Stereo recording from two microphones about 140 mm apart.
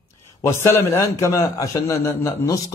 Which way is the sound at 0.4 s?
20° left (ahead or behind).